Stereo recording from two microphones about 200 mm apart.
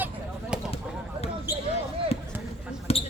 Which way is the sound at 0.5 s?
5° right (ahead or behind).